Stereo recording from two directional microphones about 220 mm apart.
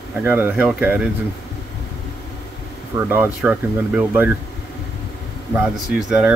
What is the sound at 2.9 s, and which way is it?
Speech, 10° right (ahead or behind).